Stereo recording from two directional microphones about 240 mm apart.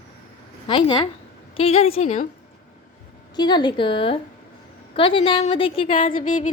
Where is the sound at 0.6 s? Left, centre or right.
Centre.